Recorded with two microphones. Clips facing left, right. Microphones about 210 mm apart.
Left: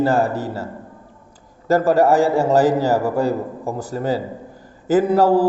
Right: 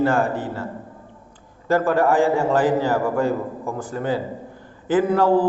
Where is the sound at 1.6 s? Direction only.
40° left (ahead or behind).